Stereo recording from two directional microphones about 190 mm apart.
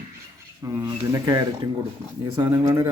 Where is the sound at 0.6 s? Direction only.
15° right (ahead or behind).